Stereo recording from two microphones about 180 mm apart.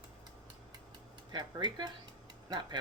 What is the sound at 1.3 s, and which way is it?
Speech, 25° right (ahead or behind).